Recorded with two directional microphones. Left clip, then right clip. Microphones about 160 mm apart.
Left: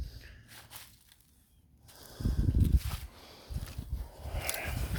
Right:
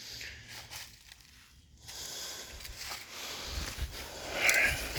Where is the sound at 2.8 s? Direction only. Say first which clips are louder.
Right 4 dB; 20° right (ahead or behind).